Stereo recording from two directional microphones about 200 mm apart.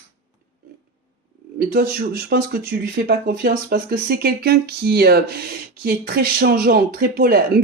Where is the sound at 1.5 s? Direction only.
50° right (ahead or behind).